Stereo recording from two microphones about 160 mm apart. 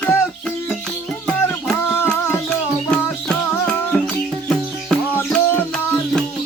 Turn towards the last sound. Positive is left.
turn(degrees=10)  # may be behind; listen again after turning